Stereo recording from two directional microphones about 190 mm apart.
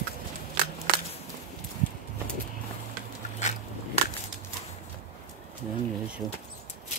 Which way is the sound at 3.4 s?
35° left (ahead or behind).